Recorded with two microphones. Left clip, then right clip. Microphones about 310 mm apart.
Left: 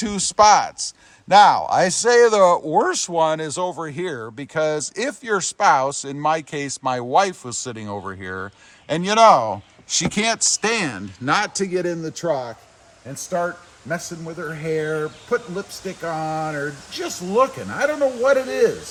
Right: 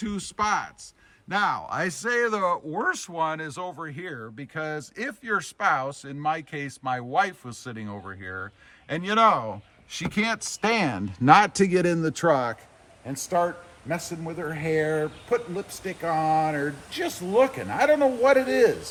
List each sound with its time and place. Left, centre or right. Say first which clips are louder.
0.0 s speech: left 13 dB; centre
11.3 s a man's voice: right 3 dB; right
13.3 s speech: left 1 dB; centre